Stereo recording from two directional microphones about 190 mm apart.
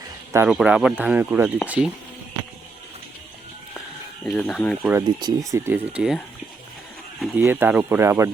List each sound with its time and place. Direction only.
0.3 s speech: 5° right (ahead or behind)
4.3 s speech: 5° left (ahead or behind)
4.8 s speech: 10° right (ahead or behind)
5.0 s speech: 20° right (ahead or behind)
7.2 s speech: 10° right (ahead or behind)